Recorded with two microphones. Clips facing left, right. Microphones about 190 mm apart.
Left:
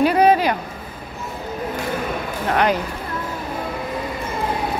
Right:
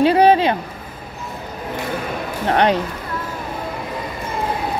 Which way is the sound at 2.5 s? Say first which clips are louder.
Right 3 dB; 30° right (ahead or behind).